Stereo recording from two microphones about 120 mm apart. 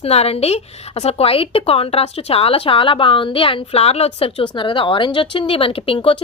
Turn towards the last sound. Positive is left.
turn(degrees=50)  # may be behind; listen again after turning